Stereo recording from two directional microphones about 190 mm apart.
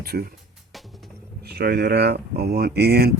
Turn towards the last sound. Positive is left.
turn(degrees=-55)  # may be behind; listen again after turning